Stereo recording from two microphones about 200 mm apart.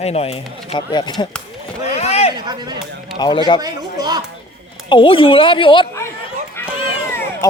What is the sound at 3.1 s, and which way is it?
Speech, 20° left (ahead or behind).